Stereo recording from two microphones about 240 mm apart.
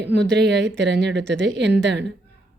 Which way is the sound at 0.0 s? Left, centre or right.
Right.